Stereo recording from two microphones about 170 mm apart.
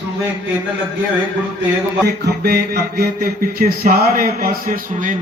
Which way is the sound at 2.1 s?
75° right (ahead or behind).